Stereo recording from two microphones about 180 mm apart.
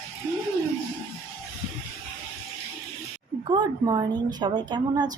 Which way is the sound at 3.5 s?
25° right (ahead or behind).